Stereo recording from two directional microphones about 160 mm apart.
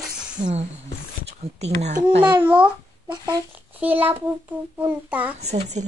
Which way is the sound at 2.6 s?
25° right (ahead or behind).